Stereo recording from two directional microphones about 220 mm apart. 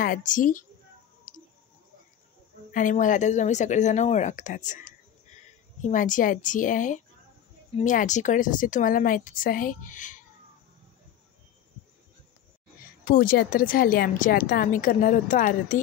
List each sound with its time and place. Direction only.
0.0 s a woman's voice: 35° left (ahead or behind)
1.3 s a sound: 35° left (ahead or behind)
2.7 s a woman's voice: 35° left (ahead or behind)
13.0 s a woman's voice: 40° left (ahead or behind)